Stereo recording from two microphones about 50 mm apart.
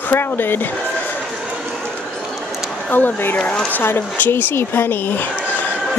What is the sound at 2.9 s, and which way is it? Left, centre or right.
Speech, left.